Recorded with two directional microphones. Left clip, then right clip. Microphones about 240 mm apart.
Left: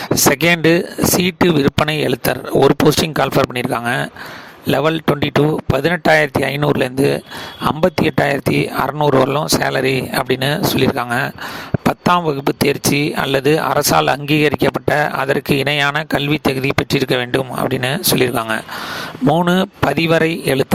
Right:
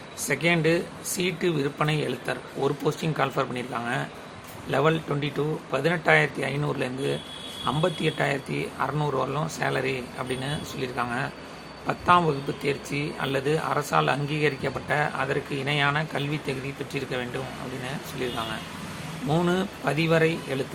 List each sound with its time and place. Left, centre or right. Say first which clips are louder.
0.3 s speech: left 9 dB; left
19.5 s speech: left 10 dB; left